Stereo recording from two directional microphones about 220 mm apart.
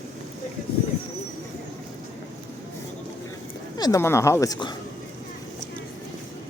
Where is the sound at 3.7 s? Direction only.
15° left (ahead or behind).